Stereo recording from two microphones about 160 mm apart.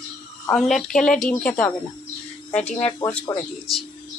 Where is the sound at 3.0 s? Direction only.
25° left (ahead or behind).